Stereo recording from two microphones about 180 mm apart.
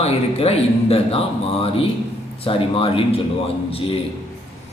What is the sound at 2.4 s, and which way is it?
Speech, 30° left (ahead or behind).